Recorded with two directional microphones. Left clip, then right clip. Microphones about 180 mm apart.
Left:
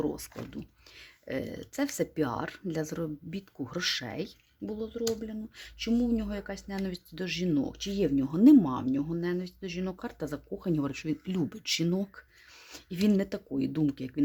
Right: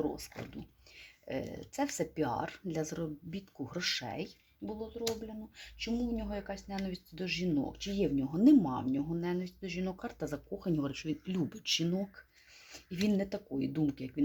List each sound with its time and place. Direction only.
0.0 s speech: 35° left (ahead or behind)